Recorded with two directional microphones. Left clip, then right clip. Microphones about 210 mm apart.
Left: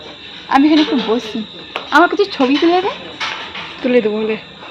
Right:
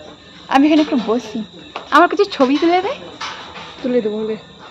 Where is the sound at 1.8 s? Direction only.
10° right (ahead or behind).